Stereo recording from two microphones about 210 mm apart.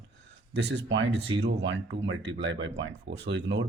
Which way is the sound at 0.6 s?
55° right (ahead or behind).